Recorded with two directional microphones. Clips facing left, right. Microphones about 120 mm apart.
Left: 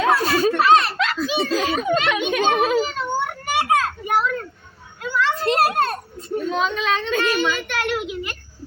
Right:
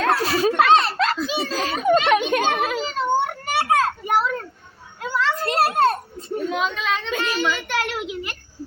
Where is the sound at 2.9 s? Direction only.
35° right (ahead or behind).